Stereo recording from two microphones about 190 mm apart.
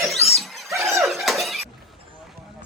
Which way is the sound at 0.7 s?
15° right (ahead or behind).